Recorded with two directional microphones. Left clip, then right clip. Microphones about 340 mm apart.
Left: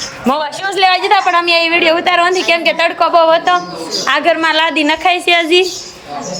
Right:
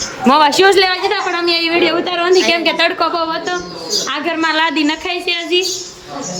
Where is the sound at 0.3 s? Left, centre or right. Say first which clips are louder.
Right 8 dB; right.